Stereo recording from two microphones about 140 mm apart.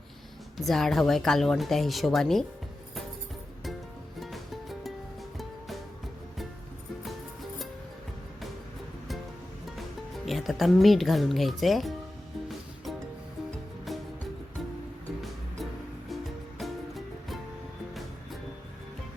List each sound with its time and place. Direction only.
0.5 s a woman's voice: centre (ahead or behind)
4.2 s music: centre (ahead or behind)
10.2 s speech: centre (ahead or behind)
16.6 s music: centre (ahead or behind)